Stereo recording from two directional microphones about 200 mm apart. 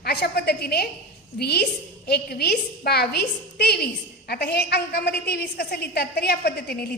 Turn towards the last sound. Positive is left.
turn(degrees=55)  # may be behind; listen again after turning